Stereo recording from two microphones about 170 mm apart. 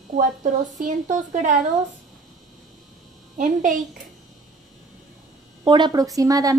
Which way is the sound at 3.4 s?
50° right (ahead or behind).